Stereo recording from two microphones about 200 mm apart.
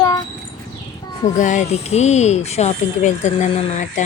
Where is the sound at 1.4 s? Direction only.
40° left (ahead or behind).